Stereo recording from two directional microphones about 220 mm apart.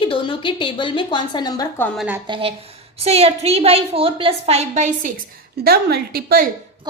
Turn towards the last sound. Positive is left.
turn(degrees=-40)  # may be behind; listen again after turning